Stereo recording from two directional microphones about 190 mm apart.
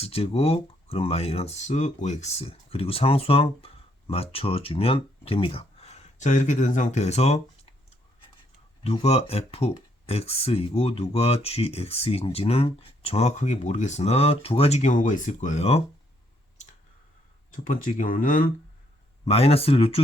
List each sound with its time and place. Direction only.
0.0 s speech: 30° left (ahead or behind)
17.5 s speech: 45° left (ahead or behind)
19.2 s speech: 30° left (ahead or behind)